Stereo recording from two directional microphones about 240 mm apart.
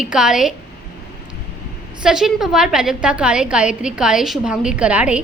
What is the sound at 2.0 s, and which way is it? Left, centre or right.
A woman's voice, centre.